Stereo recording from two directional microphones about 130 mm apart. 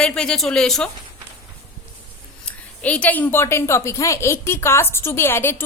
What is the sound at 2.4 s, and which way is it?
A woman's voice, 10° left (ahead or behind).